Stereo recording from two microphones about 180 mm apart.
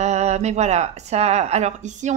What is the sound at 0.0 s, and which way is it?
Speech, 40° right (ahead or behind).